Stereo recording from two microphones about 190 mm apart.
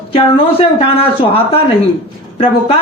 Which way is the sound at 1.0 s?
30° left (ahead or behind).